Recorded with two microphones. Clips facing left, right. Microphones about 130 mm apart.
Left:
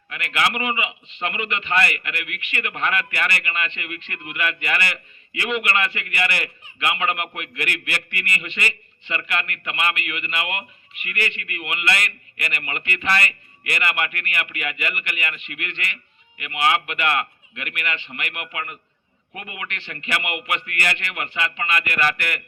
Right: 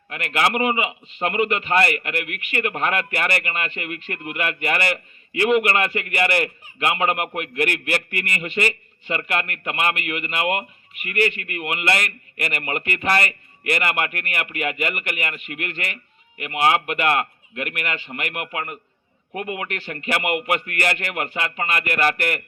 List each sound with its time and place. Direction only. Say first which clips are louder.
0.1 s a man's voice: right 2 dB; 40° right (ahead or behind)